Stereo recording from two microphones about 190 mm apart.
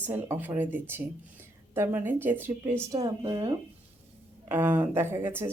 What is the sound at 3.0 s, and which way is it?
Speech, 25° right (ahead or behind).